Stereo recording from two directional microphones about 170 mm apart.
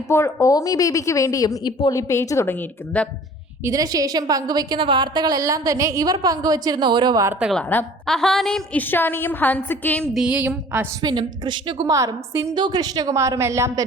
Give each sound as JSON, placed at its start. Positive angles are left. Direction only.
{"t": 0.1, "sound": "a woman's voice", "side_deg": 15}
{"t": 3.6, "sound": "a woman's voice", "side_deg": -20}
{"t": 7.3, "sound": "a woman's voice", "side_deg": -5}
{"t": 7.6, "sound": "a woman's voice", "side_deg": 10}
{"t": 10.2, "sound": "a woman's voice", "side_deg": -5}
{"t": 11.0, "sound": "a woman's voice", "side_deg": -25}